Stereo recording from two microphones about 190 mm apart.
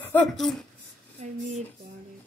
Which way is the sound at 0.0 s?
10° left (ahead or behind).